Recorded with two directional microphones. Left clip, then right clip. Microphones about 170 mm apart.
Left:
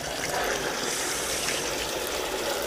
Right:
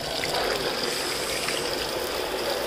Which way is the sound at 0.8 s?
15° right (ahead or behind).